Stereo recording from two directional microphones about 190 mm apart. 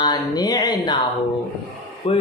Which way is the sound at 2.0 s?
30° left (ahead or behind).